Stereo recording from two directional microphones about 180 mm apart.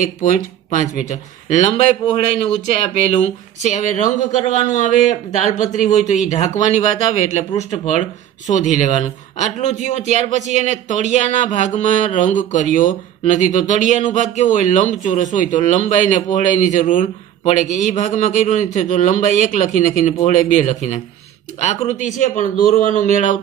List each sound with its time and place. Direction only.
0.0 s speech: 45° left (ahead or behind)